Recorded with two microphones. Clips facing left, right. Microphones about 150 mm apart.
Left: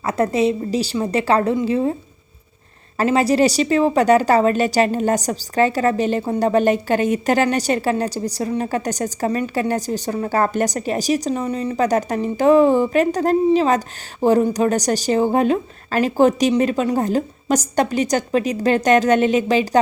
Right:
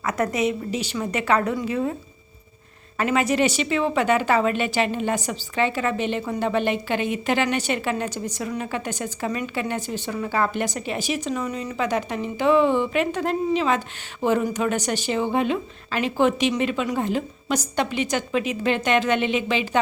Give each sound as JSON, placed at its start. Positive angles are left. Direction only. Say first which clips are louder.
{"t": 0.0, "sound": "a woman's voice", "louder": "left 5 dB", "side_deg": 30}
{"t": 3.0, "sound": "a woman's voice", "louder": "left 5 dB", "side_deg": 35}